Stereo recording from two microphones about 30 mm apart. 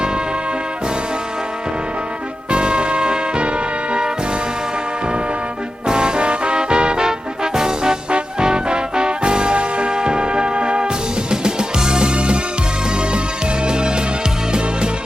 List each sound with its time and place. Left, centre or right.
2.5 s music: right
5.9 s music: right
13.7 s music: right